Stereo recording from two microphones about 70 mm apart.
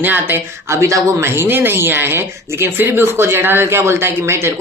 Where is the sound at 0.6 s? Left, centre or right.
Right.